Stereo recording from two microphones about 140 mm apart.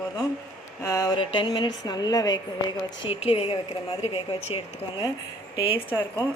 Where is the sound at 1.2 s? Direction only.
35° left (ahead or behind).